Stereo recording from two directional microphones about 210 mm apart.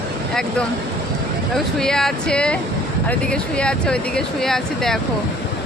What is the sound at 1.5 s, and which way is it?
Speech, centre (ahead or behind).